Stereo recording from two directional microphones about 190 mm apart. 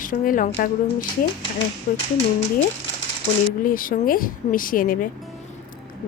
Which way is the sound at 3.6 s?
45° left (ahead or behind).